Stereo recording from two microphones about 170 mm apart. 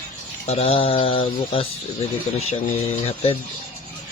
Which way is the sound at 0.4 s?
35° left (ahead or behind).